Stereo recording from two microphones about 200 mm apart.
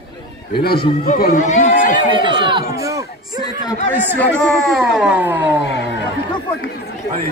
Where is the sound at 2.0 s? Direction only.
25° right (ahead or behind).